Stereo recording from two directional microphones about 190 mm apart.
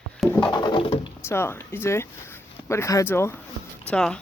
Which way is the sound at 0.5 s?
25° left (ahead or behind).